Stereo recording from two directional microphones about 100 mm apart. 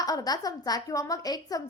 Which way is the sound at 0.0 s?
35° left (ahead or behind).